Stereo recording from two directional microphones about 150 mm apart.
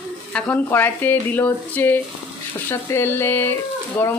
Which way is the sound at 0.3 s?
10° left (ahead or behind).